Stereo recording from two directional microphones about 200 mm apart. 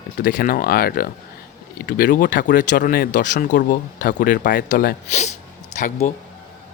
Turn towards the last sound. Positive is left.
turn(degrees=35)  # may be behind; listen again after turning